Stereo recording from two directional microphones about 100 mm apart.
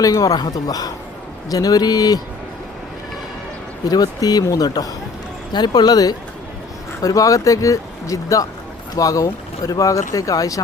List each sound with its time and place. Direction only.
0.0 s speech: 35° left (ahead or behind)
3.8 s speech: 40° left (ahead or behind)